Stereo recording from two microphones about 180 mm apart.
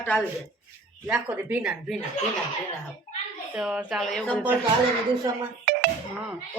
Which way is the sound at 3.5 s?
5° right (ahead or behind).